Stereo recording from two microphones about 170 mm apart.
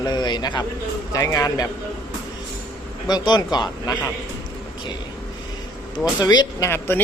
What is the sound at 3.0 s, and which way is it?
Speech, 25° left (ahead or behind).